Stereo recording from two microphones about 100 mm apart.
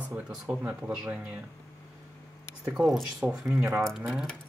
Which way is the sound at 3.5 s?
20° right (ahead or behind).